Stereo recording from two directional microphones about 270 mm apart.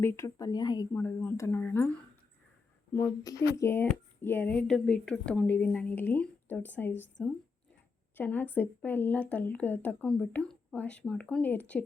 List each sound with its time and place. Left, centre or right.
0.0 s speech: centre
2.9 s a woman's voice: centre